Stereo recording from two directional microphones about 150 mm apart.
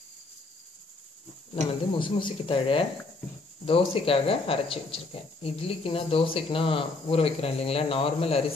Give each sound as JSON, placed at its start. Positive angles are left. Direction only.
{"t": 1.7, "sound": "speech", "side_deg": 35}